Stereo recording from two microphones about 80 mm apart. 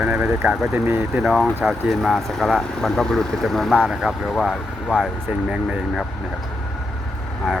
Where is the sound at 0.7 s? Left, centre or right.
Right.